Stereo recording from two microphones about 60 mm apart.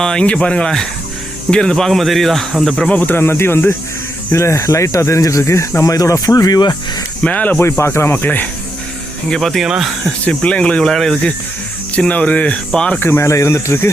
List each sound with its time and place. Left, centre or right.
0.0 s speech: centre
2.9 s speech: left
3.2 s speech: left
4.3 s speech: left
5.8 s speech: left
7.2 s speech: left
7.6 s speech: left
9.3 s speech: centre
9.6 s speech: centre
10.1 s speech: centre
11.9 s speech: left
13.0 s speech: left
13.2 s speech: left